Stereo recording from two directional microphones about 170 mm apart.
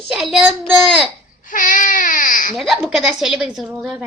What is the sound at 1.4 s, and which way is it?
Baby cry, 50° left (ahead or behind).